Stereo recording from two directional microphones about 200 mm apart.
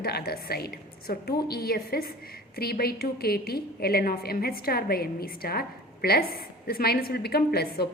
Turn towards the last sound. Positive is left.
turn(degrees=50)  # may be behind; listen again after turning